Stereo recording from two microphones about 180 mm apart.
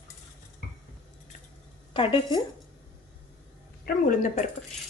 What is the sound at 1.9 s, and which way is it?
Speech, 25° left (ahead or behind).